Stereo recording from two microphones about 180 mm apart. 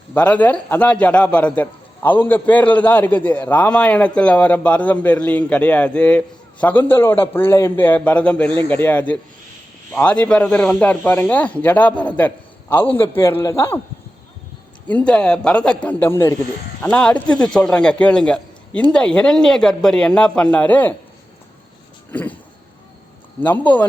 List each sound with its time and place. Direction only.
0.1 s a man's voice: 10° left (ahead or behind)
14.8 s a man's voice: 5° left (ahead or behind)
22.1 s a man's voice: 10° left (ahead or behind)
23.4 s a man's voice: 10° left (ahead or behind)